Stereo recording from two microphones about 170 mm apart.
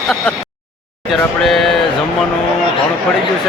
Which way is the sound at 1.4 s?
Centre (ahead or behind).